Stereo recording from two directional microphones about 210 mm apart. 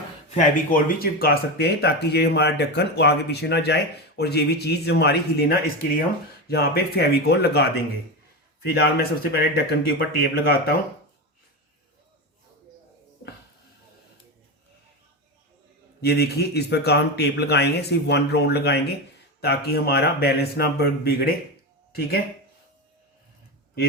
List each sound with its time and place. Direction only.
0.3 s speech: 35° left (ahead or behind)
16.0 s speech: 50° left (ahead or behind)